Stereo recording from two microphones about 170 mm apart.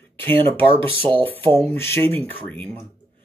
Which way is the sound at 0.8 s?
30° right (ahead or behind).